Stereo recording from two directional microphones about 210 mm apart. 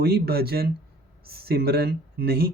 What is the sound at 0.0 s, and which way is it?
Speech, 50° right (ahead or behind).